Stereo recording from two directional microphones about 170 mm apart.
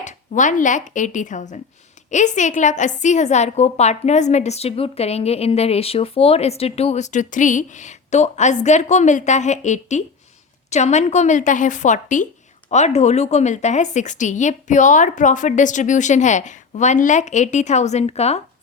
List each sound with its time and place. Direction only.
0.0 s a woman's voice: 45° left (ahead or behind)